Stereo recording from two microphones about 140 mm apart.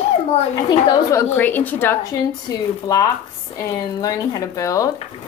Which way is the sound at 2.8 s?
25° left (ahead or behind).